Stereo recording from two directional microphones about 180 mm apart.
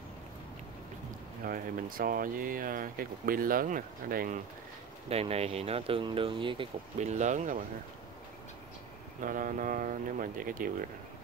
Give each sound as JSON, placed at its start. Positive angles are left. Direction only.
{"t": 1.4, "sound": "speech", "side_deg": -50}
{"t": 5.1, "sound": "speech", "side_deg": -35}
{"t": 9.2, "sound": "speech", "side_deg": -45}